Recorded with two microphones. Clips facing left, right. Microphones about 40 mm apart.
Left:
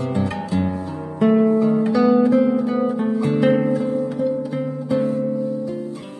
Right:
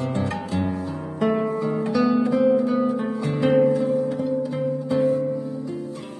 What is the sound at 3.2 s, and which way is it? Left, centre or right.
Music, left.